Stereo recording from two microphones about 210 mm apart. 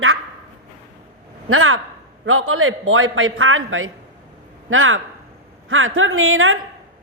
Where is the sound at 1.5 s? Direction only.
80° right.